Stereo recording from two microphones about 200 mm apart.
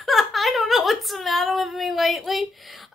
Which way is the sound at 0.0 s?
Centre (ahead or behind).